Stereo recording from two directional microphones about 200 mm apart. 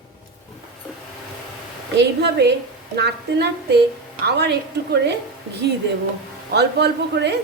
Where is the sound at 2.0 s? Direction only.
55° right (ahead or behind).